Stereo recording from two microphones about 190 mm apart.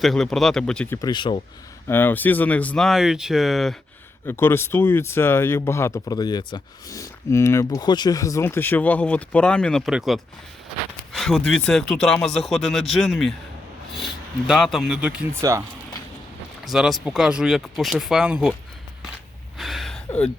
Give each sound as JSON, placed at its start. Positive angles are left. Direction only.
{"t": 0.0, "sound": "speech", "side_deg": 0}
{"t": 1.0, "sound": "speech", "side_deg": 25}
{"t": 1.9, "sound": "speech", "side_deg": 10}
{"t": 4.3, "sound": "speech", "side_deg": 10}
{"t": 15.4, "sound": "speech", "side_deg": -15}
{"t": 16.6, "sound": "speech", "side_deg": 0}
{"t": 19.5, "sound": "gasp", "side_deg": 0}